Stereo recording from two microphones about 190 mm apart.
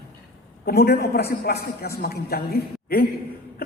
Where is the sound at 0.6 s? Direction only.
55° left (ahead or behind).